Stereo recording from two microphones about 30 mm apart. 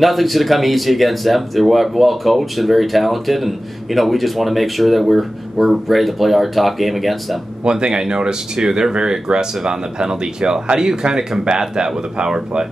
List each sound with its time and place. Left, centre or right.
0.0 s speech: centre
7.6 s speech: right
8.5 s speech: centre